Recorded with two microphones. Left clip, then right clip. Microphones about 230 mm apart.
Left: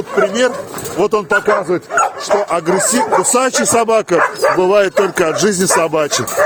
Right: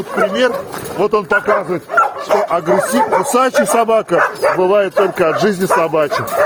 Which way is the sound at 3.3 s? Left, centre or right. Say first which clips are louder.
Right 4 dB; left.